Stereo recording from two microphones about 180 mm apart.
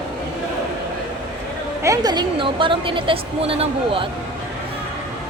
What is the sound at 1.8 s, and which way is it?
A woman's voice, 20° right (ahead or behind).